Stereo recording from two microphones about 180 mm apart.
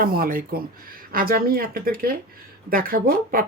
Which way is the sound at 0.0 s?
55° right (ahead or behind).